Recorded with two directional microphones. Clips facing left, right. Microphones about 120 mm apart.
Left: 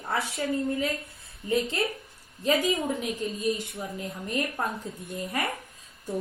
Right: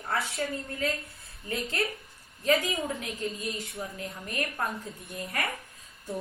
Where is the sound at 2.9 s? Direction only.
20° left (ahead or behind).